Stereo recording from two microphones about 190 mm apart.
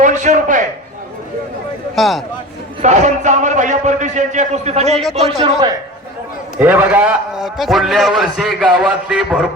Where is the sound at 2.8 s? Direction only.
40° right (ahead or behind).